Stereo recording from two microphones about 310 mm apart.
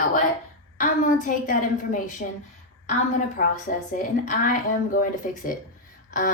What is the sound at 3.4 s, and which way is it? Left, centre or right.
Speech, left.